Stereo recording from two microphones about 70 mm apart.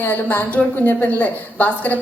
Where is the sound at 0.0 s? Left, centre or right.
Left.